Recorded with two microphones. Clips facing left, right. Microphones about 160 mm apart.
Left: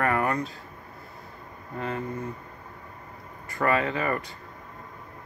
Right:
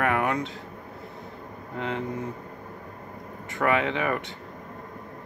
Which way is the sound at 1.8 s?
80° right.